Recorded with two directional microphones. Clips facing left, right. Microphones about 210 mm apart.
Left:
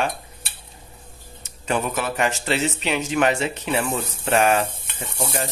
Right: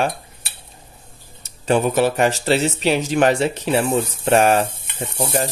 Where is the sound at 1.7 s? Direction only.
30° right (ahead or behind).